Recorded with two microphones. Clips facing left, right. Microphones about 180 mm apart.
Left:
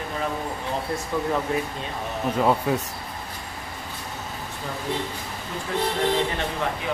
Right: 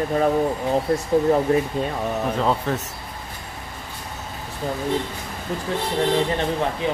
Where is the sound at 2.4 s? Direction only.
10° left (ahead or behind).